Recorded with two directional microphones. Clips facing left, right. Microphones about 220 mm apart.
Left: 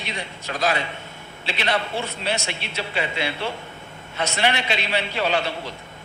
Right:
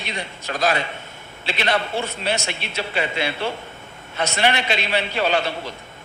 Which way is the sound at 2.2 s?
45° right (ahead or behind).